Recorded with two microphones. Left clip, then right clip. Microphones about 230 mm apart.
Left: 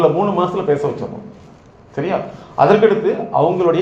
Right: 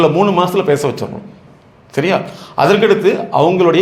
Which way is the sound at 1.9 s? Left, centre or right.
Right.